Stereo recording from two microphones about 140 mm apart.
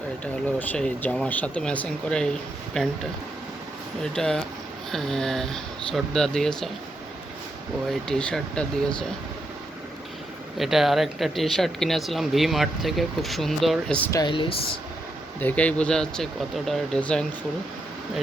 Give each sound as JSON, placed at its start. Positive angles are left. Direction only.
{"t": 0.7, "sound": "speech", "side_deg": 10}
{"t": 4.0, "sound": "speech", "side_deg": 5}
{"t": 8.0, "sound": "speech", "side_deg": 5}
{"t": 10.6, "sound": "speech", "side_deg": 0}
{"t": 14.1, "sound": "speech", "side_deg": 30}
{"t": 15.4, "sound": "speech", "side_deg": 10}